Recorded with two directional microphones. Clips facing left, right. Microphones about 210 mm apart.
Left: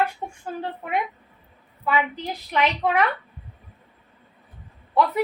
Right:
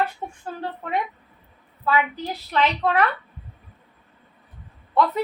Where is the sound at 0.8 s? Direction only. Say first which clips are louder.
Right 1 dB; 10° left (ahead or behind).